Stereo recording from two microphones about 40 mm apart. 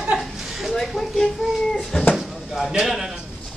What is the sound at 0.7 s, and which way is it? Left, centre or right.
Speech, centre.